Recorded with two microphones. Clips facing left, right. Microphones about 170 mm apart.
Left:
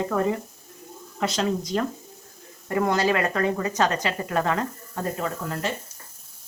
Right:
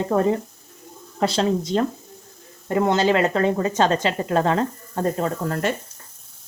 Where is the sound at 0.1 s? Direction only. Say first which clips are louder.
Right 5 dB; 30° right (ahead or behind).